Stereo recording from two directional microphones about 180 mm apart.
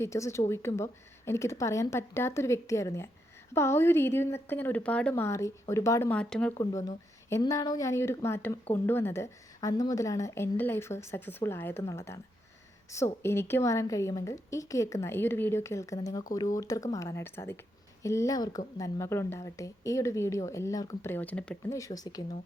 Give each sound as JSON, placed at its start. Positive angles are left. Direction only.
{"t": 0.0, "sound": "speech", "side_deg": 15}
{"t": 6.6, "sound": "speech", "side_deg": 20}
{"t": 21.8, "sound": "speech", "side_deg": 20}